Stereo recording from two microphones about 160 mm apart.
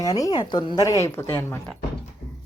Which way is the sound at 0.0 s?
20° left (ahead or behind).